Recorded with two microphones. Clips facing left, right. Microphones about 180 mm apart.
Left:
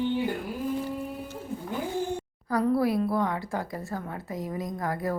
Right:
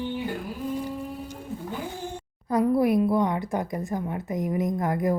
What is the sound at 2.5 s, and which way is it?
Speech, 20° right (ahead or behind).